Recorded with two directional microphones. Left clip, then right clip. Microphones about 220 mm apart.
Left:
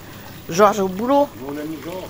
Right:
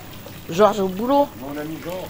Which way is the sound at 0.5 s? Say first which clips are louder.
Left 2 dB; 15° left (ahead or behind).